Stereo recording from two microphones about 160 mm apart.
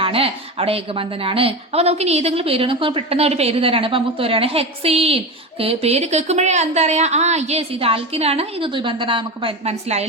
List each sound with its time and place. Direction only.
0.0 s a woman's voice: 35° right (ahead or behind)